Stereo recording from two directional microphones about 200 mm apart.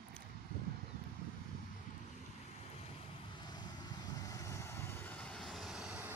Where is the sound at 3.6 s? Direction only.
20° left (ahead or behind).